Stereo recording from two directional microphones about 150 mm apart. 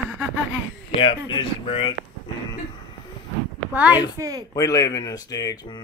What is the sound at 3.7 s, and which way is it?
Speech, 10° right (ahead or behind).